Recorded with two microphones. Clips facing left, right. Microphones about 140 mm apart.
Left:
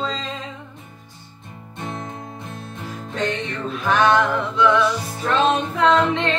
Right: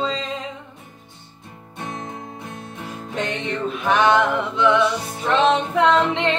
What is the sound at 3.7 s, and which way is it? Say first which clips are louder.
Music: even; 20° right (ahead or behind).